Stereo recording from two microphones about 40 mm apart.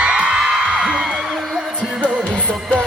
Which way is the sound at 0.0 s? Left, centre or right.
Right.